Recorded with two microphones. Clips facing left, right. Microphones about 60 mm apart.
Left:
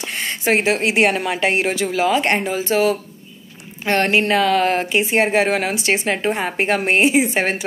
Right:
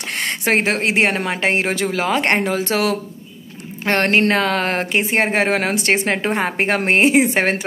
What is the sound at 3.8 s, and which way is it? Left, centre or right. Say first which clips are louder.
Speech: right 1 dB; right.